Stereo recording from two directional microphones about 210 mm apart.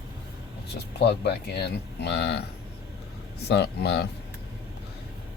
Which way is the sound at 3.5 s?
50° left (ahead or behind).